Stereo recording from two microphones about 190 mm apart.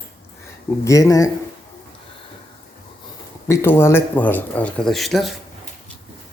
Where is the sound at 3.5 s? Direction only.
15° left (ahead or behind).